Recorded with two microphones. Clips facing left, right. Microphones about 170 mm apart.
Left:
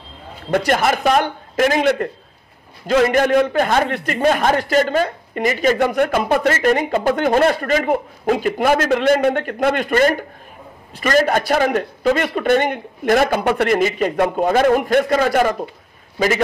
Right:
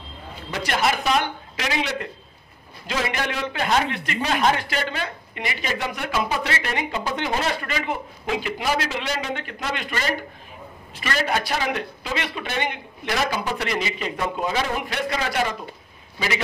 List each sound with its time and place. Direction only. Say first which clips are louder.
0.5 s a man's voice: left 7 dB; 50° left (ahead or behind)